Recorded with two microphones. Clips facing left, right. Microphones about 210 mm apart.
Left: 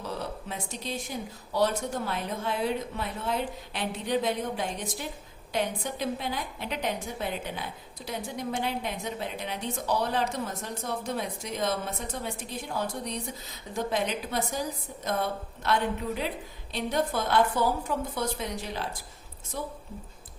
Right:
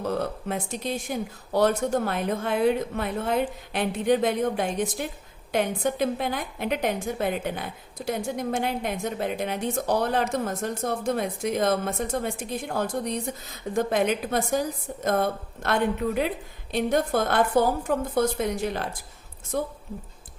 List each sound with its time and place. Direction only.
0.0 s a woman's voice: 55° right (ahead or behind)